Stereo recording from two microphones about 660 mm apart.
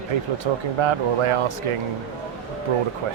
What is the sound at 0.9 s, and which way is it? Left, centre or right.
Speech, right.